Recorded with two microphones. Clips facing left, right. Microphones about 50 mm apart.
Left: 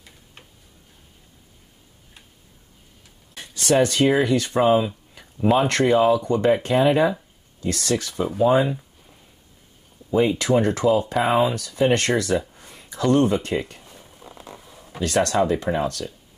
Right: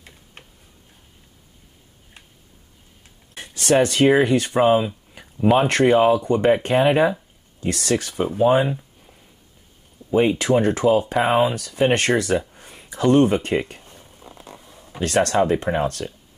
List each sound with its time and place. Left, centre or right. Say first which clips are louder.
3.7 s speech: right 2 dB; right
4.6 s a sound: right 1 dB; right
5.7 s speech: right 2 dB; right
6.6 s speech: right 1 dB; right
10.1 s speech: right 1 dB; right
13.8 s a sound: even; centre
15.0 s speech: right 2 dB; right